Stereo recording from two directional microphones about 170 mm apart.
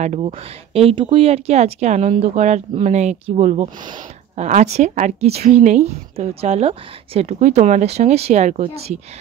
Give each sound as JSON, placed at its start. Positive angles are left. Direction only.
{"t": 0.0, "sound": "speech", "side_deg": -40}
{"t": 3.6, "sound": "speech", "side_deg": -25}
{"t": 4.4, "sound": "a woman's voice", "side_deg": -40}